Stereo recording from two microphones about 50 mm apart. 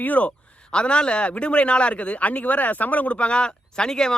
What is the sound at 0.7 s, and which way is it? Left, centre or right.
Speech, centre.